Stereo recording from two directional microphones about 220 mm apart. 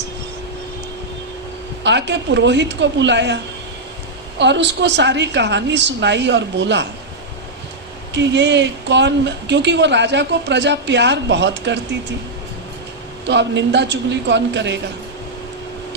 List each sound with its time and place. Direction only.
1.8 s a woman's voice: 50° right (ahead or behind)
8.1 s a woman's voice: 55° right (ahead or behind)
13.2 s a woman's voice: 55° right (ahead or behind)